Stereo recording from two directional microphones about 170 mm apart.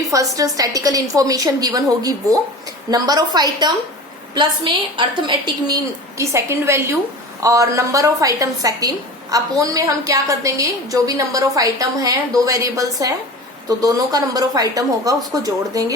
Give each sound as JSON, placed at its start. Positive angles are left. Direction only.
{"t": 0.0, "sound": "a sound", "side_deg": -20}
{"t": 0.3, "sound": "a woman's voice", "side_deg": -20}
{"t": 6.1, "sound": "a woman's voice", "side_deg": -15}